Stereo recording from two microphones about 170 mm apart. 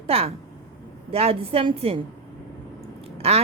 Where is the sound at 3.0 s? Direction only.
35° right (ahead or behind).